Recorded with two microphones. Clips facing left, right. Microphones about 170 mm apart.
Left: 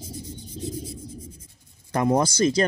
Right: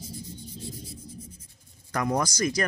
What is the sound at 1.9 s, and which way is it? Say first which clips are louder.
Speech: left 6 dB; 25° left (ahead or behind).